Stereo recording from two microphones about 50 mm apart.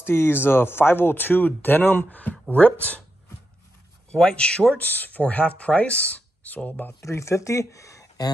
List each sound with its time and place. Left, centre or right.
0.0 s speech: left
4.1 s speech: centre
4.7 s speech: left
7.0 s speech: left